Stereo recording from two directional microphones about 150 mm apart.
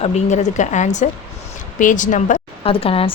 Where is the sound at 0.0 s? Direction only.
50° left (ahead or behind).